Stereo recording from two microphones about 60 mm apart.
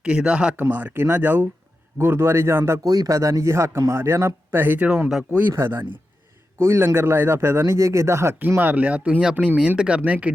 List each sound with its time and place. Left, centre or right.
0.0 s speech: centre
0.5 s a man's voice: right
2.8 s a man's voice: right
4.6 s speech: right
4.9 s speech: centre
5.5 s a man's voice: right
8.4 s speech: right
9.6 s speech: centre